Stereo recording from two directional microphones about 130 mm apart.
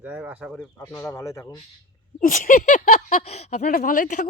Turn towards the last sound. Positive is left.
turn(degrees=80)